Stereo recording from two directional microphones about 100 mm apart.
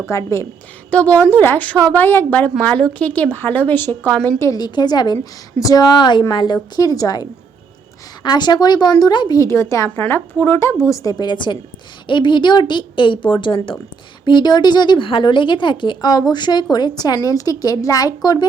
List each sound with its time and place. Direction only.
0.1 s speech: 30° left (ahead or behind)
0.9 s a woman's voice: 15° left (ahead or behind)
4.5 s speech: 45° left (ahead or behind)
5.1 s speech: 35° left (ahead or behind)
9.4 s speech: 30° left (ahead or behind)